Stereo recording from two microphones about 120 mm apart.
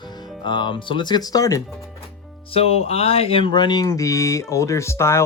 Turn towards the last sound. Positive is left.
turn(degrees=25)  # may be behind; listen again after turning